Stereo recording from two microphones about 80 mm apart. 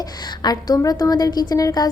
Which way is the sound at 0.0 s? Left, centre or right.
Left.